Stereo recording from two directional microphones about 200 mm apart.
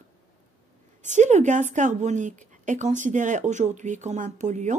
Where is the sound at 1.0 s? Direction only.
35° right (ahead or behind).